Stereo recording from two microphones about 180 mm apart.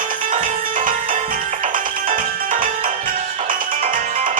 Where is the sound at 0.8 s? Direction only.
45° right (ahead or behind).